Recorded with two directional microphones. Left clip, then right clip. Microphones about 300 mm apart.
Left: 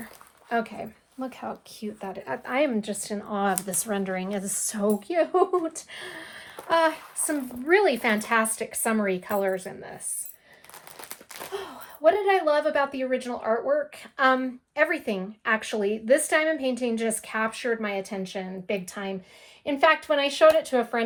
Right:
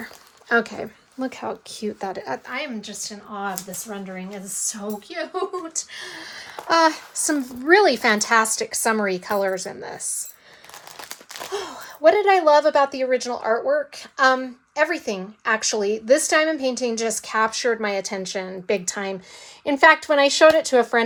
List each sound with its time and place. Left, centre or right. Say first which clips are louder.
0.4 s speech: right 7 dB; right
2.5 s speech: left 5 dB; centre
5.9 s speech: right 3 dB; centre
6.7 s a woman's voice: right 5 dB; centre
11.1 s a woman's voice: right 6 dB; right